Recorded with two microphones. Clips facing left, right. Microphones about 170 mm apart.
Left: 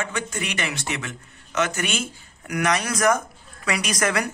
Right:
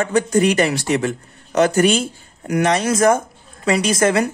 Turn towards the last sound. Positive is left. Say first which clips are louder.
# right 8 dB
turn(degrees=-25)  # may be behind; listen again after turning